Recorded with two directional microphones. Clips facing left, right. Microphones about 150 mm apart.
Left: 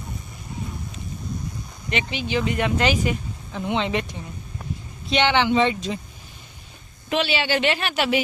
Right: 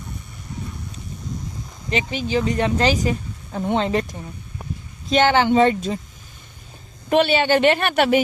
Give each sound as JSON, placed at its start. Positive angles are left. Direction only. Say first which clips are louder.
{"t": 1.9, "sound": "speech", "louder": "right 3 dB", "side_deg": -40}
{"t": 5.0, "sound": "a woman's voice", "louder": "right 3 dB", "side_deg": -45}
{"t": 7.1, "sound": "a woman's voice", "louder": "right 6 dB", "side_deg": -50}